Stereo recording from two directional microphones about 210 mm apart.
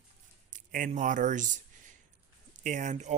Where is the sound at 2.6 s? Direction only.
35° right (ahead or behind).